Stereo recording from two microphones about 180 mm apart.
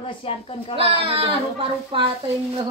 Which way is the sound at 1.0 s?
30° right (ahead or behind).